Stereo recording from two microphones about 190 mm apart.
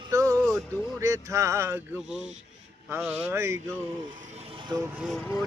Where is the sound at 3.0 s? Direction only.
5° right (ahead or behind).